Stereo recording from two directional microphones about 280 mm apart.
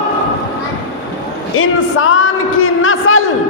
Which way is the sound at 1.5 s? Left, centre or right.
Left.